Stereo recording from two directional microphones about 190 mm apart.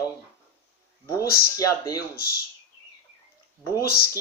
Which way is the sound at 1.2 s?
55° left (ahead or behind).